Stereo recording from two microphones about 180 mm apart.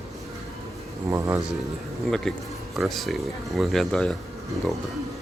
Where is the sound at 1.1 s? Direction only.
15° right (ahead or behind).